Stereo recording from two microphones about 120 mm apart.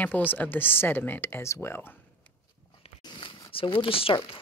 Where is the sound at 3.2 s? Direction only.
45° left (ahead or behind).